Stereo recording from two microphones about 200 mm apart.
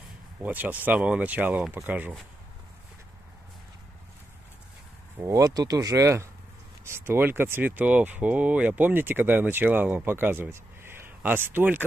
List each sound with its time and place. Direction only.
0.4 s speech: 10° right (ahead or behind)
5.2 s speech: 15° right (ahead or behind)